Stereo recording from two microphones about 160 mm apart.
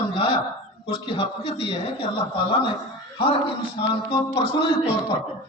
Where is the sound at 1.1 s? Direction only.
35° left (ahead or behind).